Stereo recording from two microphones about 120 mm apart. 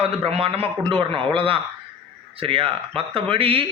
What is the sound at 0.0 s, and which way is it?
Speech, 55° right (ahead or behind).